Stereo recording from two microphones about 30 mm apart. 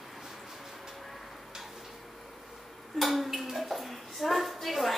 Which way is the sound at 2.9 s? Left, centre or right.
Centre.